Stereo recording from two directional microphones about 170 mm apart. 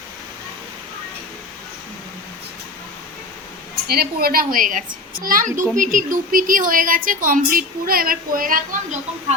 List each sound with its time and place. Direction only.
3.8 s a woman's voice: 65° right (ahead or behind)